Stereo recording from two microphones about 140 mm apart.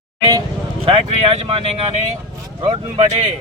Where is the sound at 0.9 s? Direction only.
45° right (ahead or behind).